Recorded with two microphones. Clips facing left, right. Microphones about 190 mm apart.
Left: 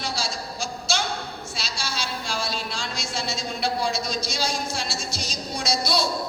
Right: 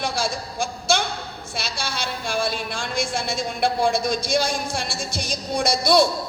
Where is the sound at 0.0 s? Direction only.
55° right (ahead or behind).